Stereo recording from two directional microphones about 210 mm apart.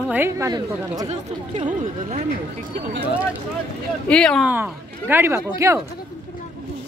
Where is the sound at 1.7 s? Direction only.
35° right (ahead or behind).